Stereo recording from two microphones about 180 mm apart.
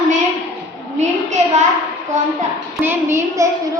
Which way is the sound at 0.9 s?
40° right (ahead or behind).